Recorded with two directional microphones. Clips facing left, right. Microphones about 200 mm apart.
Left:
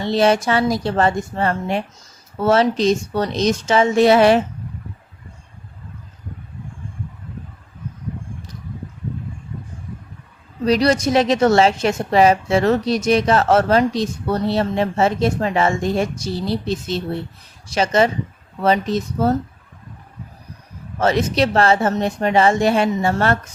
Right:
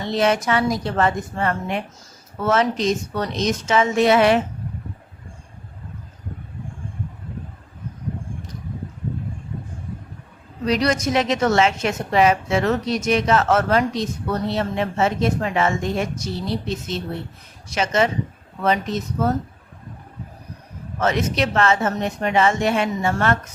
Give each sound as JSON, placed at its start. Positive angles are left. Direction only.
{"t": 0.0, "sound": "a woman's voice", "side_deg": 30}
{"t": 10.7, "sound": "a woman's voice", "side_deg": 35}
{"t": 21.0, "sound": "a woman's voice", "side_deg": 35}